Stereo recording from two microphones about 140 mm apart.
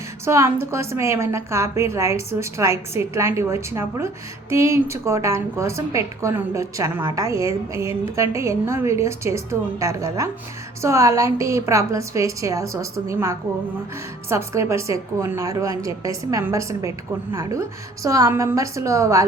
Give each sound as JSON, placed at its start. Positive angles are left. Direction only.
{"t": 0.3, "sound": "a woman's voice", "side_deg": -20}